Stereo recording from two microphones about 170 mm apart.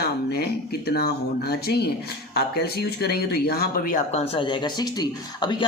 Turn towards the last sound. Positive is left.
turn(degrees=25)  # may be behind; listen again after turning